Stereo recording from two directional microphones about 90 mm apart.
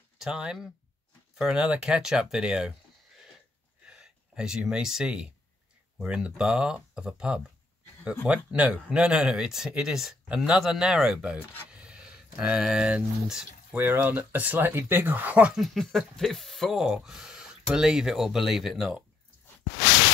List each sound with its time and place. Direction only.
0.2 s speech: 10° right (ahead or behind)
3.8 s speech: 10° right (ahead or behind)
8.5 s speech: 15° right (ahead or behind)
13.7 s speech: 25° right (ahead or behind)
15.6 s speech: centre (ahead or behind)